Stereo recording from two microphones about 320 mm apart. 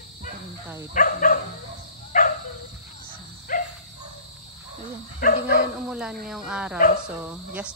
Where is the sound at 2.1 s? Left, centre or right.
Left.